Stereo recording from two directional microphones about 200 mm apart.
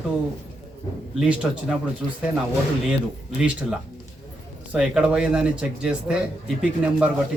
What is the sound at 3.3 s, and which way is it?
Speech, 5° right (ahead or behind).